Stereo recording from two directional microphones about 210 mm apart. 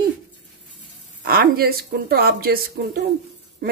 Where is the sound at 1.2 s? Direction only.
45° right (ahead or behind).